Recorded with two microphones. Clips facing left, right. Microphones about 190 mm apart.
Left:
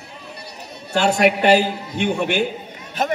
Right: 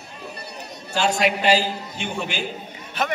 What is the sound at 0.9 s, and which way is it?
A man's voice, 60° left (ahead or behind).